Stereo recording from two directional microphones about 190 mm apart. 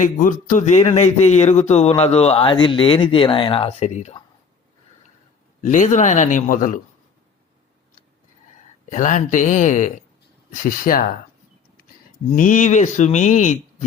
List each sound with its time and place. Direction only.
0.0 s speech: 45° left (ahead or behind)
5.6 s speech: 40° left (ahead or behind)
8.9 s speech: 40° left (ahead or behind)
12.4 s speech: 40° left (ahead or behind)